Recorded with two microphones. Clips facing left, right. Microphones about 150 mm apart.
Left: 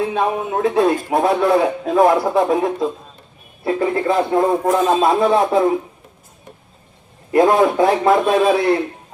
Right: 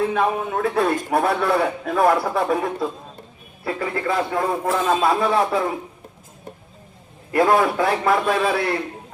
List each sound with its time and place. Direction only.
0.1 s a man's voice: 20° left (ahead or behind)
7.3 s a man's voice: 20° left (ahead or behind)